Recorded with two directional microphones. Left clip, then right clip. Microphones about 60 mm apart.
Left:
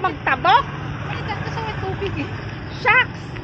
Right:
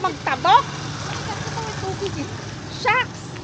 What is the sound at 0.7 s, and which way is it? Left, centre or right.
Vehicle, right.